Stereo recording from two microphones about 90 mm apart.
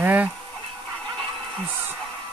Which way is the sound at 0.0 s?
15° right (ahead or behind).